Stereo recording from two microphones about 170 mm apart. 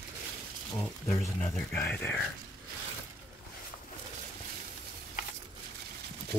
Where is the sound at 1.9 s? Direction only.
10° left (ahead or behind).